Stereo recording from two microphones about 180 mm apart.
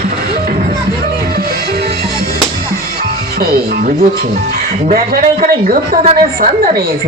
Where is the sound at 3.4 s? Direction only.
55° right (ahead or behind).